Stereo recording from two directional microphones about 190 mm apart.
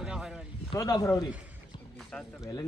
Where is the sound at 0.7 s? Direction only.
15° left (ahead or behind).